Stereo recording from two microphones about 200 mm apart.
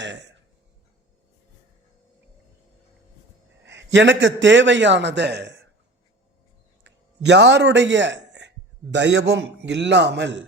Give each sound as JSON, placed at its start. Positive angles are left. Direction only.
{"t": 0.0, "sound": "a sound", "side_deg": -65}
{"t": 3.6, "sound": "a man's voice", "side_deg": -65}
{"t": 6.8, "sound": "a man's voice", "side_deg": -60}